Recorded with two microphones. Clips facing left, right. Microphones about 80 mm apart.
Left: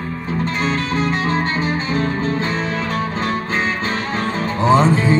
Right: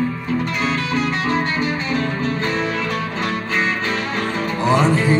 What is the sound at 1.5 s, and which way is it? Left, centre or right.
Music, left.